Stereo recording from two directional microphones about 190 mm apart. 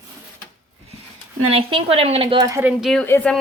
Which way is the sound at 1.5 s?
30° right (ahead or behind).